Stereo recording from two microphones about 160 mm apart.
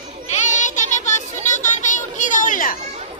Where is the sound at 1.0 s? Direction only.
45° left (ahead or behind).